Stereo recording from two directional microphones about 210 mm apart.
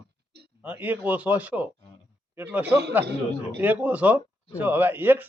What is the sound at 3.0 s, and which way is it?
Speech, 55° right (ahead or behind).